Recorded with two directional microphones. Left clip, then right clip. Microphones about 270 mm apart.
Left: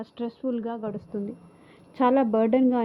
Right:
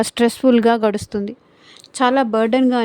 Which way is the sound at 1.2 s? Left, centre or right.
Right.